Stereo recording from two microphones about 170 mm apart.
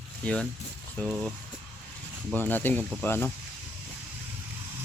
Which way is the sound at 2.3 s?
10° left (ahead or behind).